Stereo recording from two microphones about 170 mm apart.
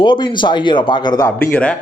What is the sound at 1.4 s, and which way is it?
Speech, 10° left (ahead or behind).